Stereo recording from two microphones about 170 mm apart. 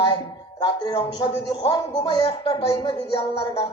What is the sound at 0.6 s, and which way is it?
Speech, 25° left (ahead or behind).